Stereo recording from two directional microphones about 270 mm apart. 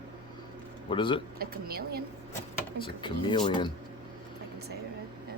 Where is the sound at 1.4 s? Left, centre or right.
Right.